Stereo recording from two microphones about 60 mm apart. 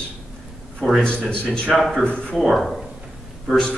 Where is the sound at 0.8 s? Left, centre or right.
Centre.